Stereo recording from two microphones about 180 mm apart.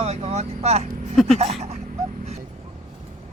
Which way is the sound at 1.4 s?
35° right (ahead or behind).